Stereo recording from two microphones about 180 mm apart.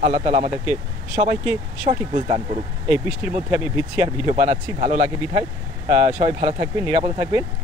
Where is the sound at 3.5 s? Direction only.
10° right (ahead or behind).